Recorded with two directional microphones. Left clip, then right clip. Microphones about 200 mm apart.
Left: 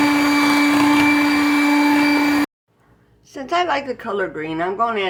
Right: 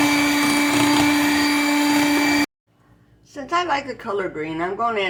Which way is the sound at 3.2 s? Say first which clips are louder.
Left 3 dB; 50° left (ahead or behind).